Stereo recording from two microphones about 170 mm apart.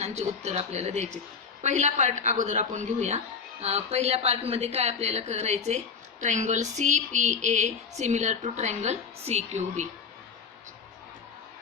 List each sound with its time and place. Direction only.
0.0 s a woman's voice: 40° right (ahead or behind)